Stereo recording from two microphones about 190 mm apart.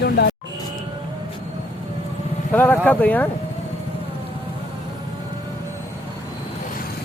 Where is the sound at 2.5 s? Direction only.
10° left (ahead or behind).